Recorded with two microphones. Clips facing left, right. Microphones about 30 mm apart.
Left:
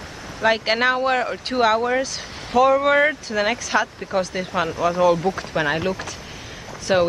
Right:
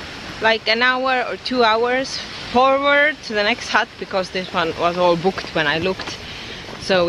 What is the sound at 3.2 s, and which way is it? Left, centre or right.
Speech, right.